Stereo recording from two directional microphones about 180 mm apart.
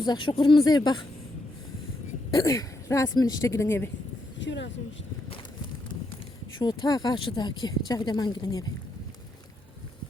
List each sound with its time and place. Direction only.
0.0 s a woman's voice: 25° left (ahead or behind)
2.3 s speech: 20° left (ahead or behind)
4.4 s speech: 85° left
6.6 s a woman's voice: 20° left (ahead or behind)